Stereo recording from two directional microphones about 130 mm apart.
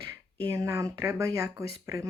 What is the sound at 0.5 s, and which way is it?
Speech, 20° right (ahead or behind).